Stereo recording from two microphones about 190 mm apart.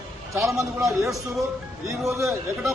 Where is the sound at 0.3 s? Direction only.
15° right (ahead or behind).